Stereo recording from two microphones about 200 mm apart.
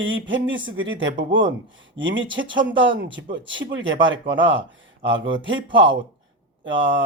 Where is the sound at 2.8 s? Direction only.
65° right (ahead or behind).